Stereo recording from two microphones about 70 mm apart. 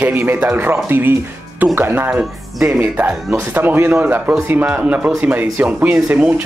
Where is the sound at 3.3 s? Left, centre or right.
Right.